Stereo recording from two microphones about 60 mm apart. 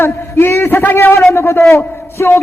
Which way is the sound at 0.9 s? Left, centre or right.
Left.